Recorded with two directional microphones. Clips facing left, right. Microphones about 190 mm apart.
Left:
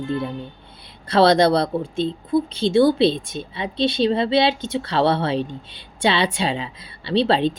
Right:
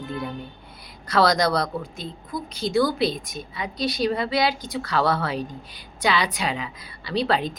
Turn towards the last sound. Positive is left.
turn(degrees=30)  # may be behind; listen again after turning